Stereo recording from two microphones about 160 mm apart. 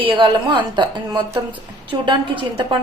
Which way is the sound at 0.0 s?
30° right (ahead or behind).